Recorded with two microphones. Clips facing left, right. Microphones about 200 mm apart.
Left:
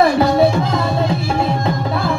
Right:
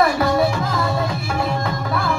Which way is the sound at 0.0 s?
25° left (ahead or behind).